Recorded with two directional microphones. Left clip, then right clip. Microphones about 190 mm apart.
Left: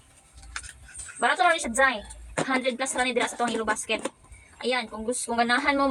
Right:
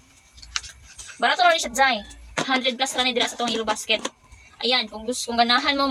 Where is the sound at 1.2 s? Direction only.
5° left (ahead or behind).